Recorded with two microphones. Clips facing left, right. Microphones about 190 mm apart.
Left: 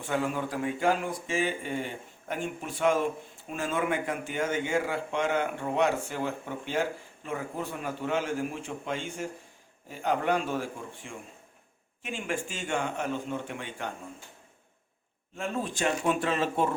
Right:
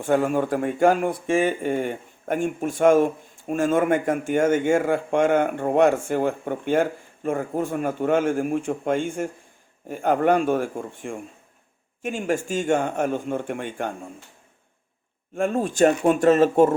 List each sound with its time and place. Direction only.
0.0 s speech: 50° right (ahead or behind)
15.4 s speech: 50° right (ahead or behind)